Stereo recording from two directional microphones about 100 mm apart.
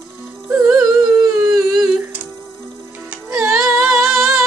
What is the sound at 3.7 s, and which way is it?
Singing, centre (ahead or behind).